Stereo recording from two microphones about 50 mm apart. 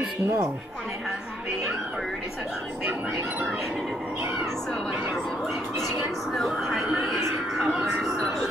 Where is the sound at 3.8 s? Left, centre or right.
Centre.